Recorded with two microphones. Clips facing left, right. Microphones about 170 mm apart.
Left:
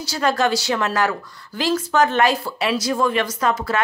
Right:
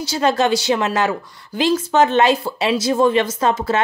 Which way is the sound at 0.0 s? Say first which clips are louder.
Right 3 dB; 20° right (ahead or behind).